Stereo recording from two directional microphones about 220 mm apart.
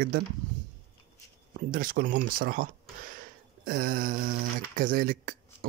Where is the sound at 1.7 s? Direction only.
40° right (ahead or behind).